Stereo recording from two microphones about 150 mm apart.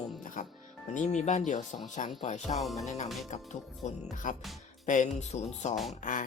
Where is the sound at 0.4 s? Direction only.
55° left (ahead or behind).